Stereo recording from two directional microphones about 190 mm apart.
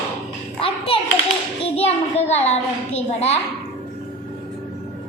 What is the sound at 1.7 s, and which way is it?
Speech, 35° left (ahead or behind).